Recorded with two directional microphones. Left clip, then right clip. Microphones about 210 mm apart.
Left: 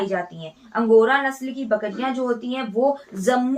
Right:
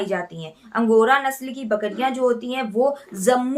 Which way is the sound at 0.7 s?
50° right (ahead or behind).